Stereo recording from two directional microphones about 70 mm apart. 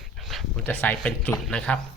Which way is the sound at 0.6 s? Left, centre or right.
Left.